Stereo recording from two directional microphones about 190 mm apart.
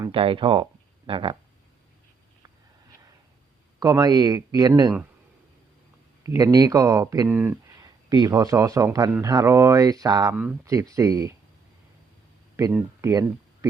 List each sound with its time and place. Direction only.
0.1 s speech: 30° right (ahead or behind)
3.8 s speech: 20° right (ahead or behind)
6.2 s speech: 20° right (ahead or behind)
10.3 s speech: 10° right (ahead or behind)
12.7 s speech: 15° right (ahead or behind)